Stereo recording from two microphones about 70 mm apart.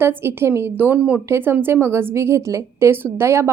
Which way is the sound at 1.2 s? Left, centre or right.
Right.